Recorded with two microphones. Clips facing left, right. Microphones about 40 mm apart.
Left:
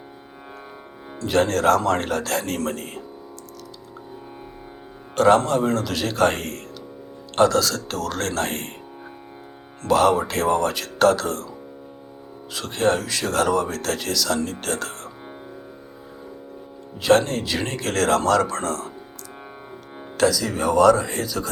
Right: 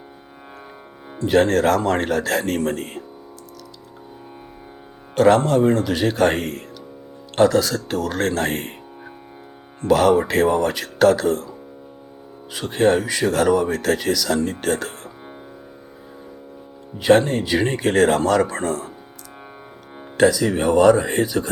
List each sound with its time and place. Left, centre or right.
1.3 s speech: right
5.1 s speech: right
9.8 s speech: centre
10.2 s speech: right
12.5 s speech: right
17.0 s speech: right
20.1 s speech: right